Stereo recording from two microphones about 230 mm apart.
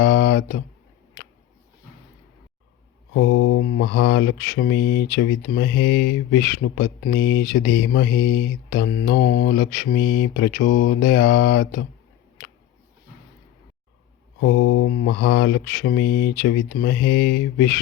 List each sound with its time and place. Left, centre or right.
0.0 s a sound: left
3.1 s mantra: left
3.8 s speech: left
9.0 s speech: left
14.4 s speech: left